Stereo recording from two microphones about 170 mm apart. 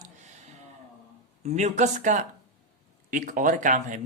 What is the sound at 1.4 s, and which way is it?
Speech, 40° right (ahead or behind).